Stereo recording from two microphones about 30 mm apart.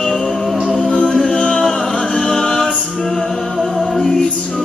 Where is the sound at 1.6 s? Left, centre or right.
Centre.